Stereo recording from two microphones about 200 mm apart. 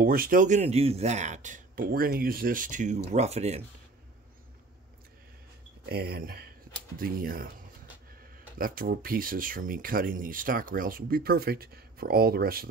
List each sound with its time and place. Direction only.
0.0 s speech: 45° right (ahead or behind)
5.9 s speech: 50° right (ahead or behind)
8.5 s speech: 45° right (ahead or behind)